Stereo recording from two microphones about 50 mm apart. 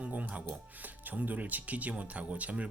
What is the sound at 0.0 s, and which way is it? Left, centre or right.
Speech, right.